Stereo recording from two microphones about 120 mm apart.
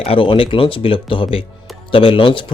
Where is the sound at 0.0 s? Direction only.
50° left (ahead or behind).